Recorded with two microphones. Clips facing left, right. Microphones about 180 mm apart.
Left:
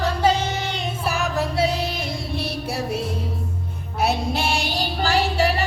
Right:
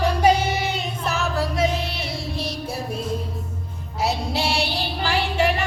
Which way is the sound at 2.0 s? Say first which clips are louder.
Left 1 dB; 60° left (ahead or behind).